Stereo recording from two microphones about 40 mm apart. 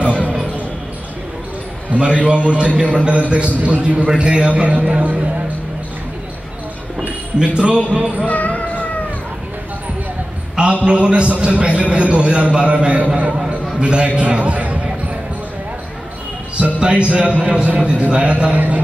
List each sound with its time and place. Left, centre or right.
2.0 s a man's voice: right
7.3 s a man's voice: right
8.3 s music: left
10.6 s a man's voice: right
17.1 s a man's voice: right